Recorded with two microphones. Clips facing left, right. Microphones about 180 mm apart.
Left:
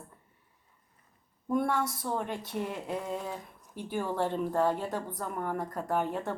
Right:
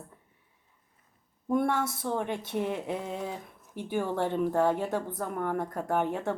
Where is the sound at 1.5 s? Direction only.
65° right (ahead or behind).